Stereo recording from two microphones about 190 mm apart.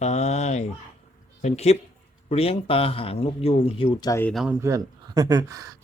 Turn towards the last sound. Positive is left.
turn(degrees=-15)  # may be behind; listen again after turning